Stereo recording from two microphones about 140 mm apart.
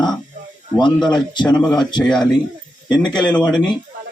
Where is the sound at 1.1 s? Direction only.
30° left (ahead or behind).